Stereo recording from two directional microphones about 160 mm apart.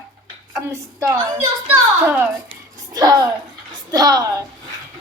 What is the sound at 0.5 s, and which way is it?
A woman's voice, 20° right (ahead or behind).